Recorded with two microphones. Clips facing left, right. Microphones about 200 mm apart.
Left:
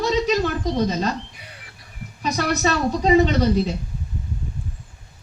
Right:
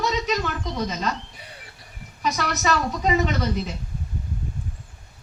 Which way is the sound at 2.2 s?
35° left (ahead or behind).